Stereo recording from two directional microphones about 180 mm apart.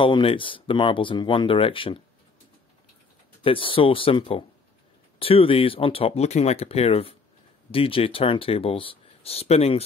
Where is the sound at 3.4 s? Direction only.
30° left (ahead or behind).